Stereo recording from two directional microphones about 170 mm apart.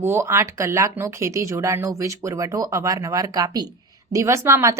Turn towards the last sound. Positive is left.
turn(degrees=-15)  # may be behind; listen again after turning